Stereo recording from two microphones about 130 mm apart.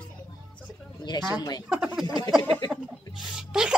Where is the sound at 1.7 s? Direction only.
5° right (ahead or behind).